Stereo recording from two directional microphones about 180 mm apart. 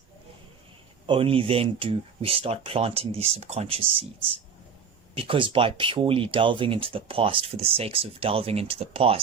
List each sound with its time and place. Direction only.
1.0 s speech: 30° right (ahead or behind)